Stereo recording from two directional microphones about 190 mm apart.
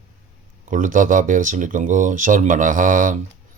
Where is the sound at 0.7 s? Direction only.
45° right (ahead or behind).